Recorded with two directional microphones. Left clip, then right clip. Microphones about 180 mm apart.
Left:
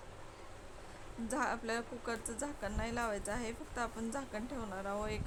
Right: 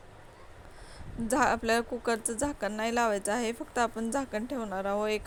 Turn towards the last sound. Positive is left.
turn(degrees=-35)  # may be behind; listen again after turning